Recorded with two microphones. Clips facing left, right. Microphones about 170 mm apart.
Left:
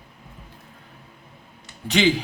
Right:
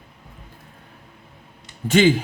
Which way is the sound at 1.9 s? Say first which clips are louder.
Right 4 dB; 50° right (ahead or behind).